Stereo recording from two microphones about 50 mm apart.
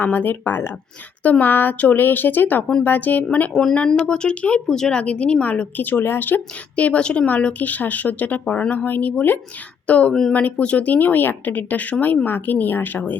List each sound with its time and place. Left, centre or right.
0.0 s a woman's voice: left
1.2 s a woman's voice: left
3.5 s speech: centre
4.0 s speech: centre
4.7 s speech: centre
5.4 s a woman's voice: left
6.7 s a woman's voice: left
9.8 s a woman's voice: left